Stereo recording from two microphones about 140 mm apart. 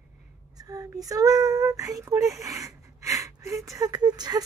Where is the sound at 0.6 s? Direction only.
25° right (ahead or behind).